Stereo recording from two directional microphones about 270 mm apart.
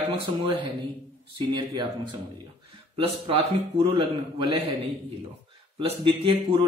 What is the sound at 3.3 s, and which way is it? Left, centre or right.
A man's voice, centre.